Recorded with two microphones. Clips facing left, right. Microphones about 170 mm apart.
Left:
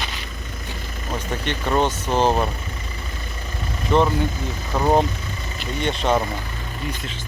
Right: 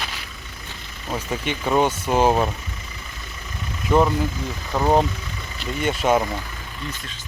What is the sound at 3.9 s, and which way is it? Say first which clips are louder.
Speech: even; 5° right (ahead or behind).